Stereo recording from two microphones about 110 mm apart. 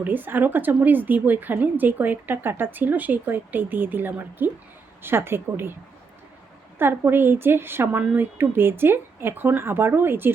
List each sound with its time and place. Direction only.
0.0 s a woman's voice: 15° right (ahead or behind)
6.7 s a woman's voice: 20° right (ahead or behind)